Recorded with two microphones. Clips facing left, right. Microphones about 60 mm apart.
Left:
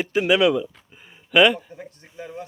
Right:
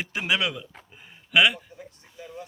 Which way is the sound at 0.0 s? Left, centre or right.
Centre.